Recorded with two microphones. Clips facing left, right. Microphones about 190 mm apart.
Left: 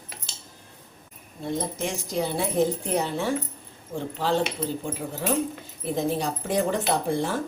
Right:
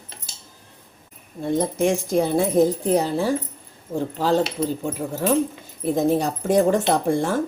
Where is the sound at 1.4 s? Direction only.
55° right (ahead or behind).